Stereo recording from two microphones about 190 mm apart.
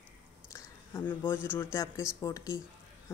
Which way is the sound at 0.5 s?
10° left (ahead or behind).